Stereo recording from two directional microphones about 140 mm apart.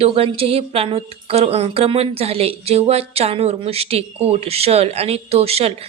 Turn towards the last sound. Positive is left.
turn(degrees=-45)  # may be behind; listen again after turning